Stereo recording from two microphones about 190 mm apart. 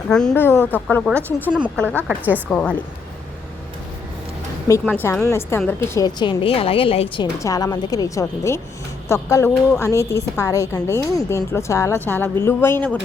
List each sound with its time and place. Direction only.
0.1 s a woman's voice: 5° left (ahead or behind)
1.5 s a woman's voice: 5° right (ahead or behind)
2.5 s speech: 5° left (ahead or behind)
4.7 s a woman's voice: 10° left (ahead or behind); by 7.3 s 30° left (ahead or behind)
7.3 s a woman's voice: 20° left (ahead or behind)